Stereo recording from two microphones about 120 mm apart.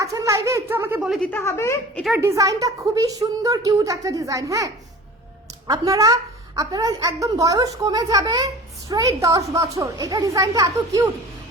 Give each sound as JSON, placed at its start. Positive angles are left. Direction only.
{"t": 0.0, "sound": "speech", "side_deg": -25}
{"t": 1.3, "sound": "a woman's voice", "side_deg": 20}
{"t": 2.1, "sound": "a woman's voice", "side_deg": -25}